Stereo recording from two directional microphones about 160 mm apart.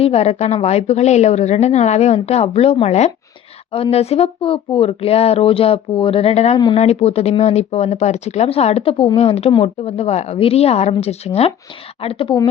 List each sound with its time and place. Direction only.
0.0 s a woman's voice: 40° left (ahead or behind)